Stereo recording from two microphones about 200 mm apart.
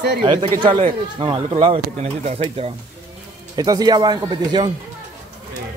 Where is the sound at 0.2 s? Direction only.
25° right (ahead or behind).